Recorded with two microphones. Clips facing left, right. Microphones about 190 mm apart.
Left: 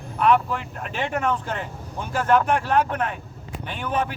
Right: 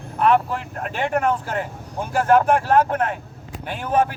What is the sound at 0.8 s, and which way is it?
Speech, 50° right (ahead or behind).